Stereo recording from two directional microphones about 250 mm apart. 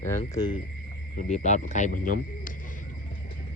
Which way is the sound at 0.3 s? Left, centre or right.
Centre.